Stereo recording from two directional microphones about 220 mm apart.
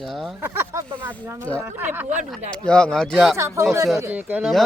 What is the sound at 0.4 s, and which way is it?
Speech, 10° right (ahead or behind).